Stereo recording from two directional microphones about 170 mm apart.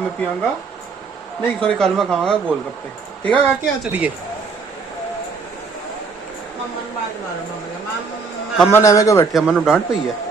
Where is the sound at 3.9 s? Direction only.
10° right (ahead or behind).